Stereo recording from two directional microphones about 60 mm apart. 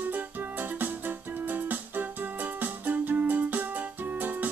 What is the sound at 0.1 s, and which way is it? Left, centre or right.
Music, right.